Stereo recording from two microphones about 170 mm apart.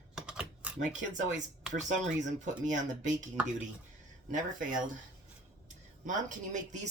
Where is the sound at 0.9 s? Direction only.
45° right (ahead or behind).